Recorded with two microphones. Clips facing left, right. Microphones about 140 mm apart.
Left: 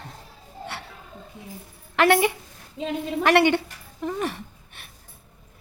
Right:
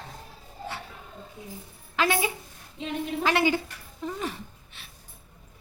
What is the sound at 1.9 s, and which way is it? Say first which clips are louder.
A woman's voice: left 7 dB; 70° left (ahead or behind).